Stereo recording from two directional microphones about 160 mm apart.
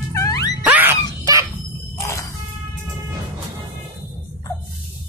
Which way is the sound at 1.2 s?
20° right (ahead or behind).